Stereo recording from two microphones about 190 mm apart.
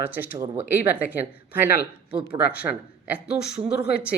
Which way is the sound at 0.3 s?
15° right (ahead or behind).